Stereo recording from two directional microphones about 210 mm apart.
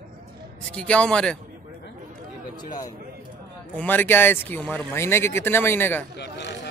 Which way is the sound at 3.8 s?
10° left (ahead or behind).